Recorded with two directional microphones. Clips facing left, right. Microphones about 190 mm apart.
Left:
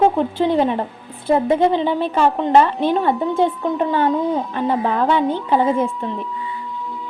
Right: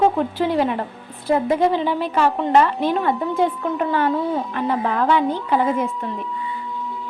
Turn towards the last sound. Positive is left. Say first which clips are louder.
# left 3 dB
turn(degrees=25)  # may be behind; listen again after turning